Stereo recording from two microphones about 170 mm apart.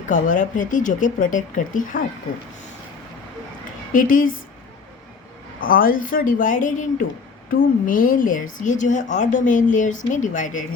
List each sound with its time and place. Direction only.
0.1 s speech: 50° left (ahead or behind)
3.9 s speech: 50° left (ahead or behind)
5.5 s speech: 55° left (ahead or behind)